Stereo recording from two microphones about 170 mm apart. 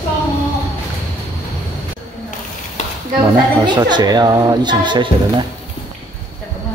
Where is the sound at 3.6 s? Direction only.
25° right (ahead or behind).